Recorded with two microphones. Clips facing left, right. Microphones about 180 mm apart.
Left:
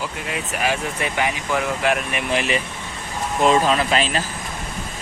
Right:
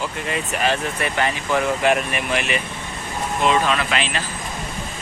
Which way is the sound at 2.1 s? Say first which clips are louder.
Left 1 dB; 25° left (ahead or behind).